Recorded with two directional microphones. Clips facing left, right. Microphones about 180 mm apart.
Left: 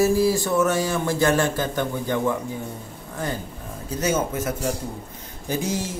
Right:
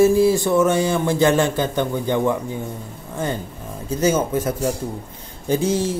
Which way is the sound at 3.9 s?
30° right (ahead or behind).